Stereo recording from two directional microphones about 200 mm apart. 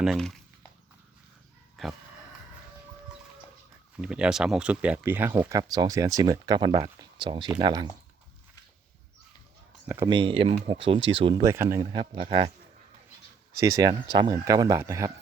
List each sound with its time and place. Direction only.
0.0 s speech: centre (ahead or behind)
1.8 s speech: centre (ahead or behind)
3.9 s speech: 5° right (ahead or behind); by 7.9 s 20° right (ahead or behind)
10.1 s speech: 25° right (ahead or behind)
11.5 s speech: 15° right (ahead or behind)
13.5 s speech: 15° right (ahead or behind)